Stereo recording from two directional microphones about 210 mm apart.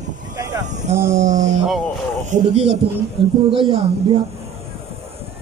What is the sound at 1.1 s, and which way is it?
Speech, 35° right (ahead or behind).